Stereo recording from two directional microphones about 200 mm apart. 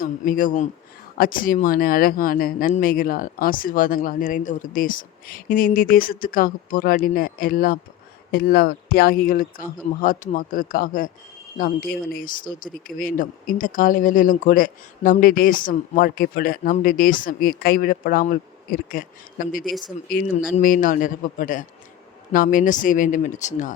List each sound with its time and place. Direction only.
0.0 s a man's voice: 45° left (ahead or behind)